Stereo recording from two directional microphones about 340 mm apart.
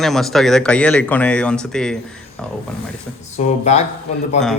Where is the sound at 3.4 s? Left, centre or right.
Left.